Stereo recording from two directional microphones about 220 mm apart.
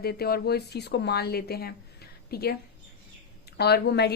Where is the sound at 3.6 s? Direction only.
50° left (ahead or behind).